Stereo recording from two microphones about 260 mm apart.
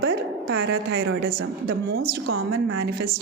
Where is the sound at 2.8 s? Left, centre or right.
Right.